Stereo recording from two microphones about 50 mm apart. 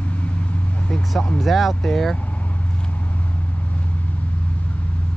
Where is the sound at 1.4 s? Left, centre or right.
Centre.